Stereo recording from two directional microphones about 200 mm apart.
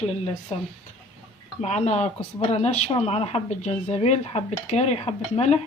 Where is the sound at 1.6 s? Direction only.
35° left (ahead or behind).